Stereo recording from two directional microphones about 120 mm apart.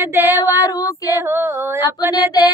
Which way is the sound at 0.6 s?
30° left (ahead or behind).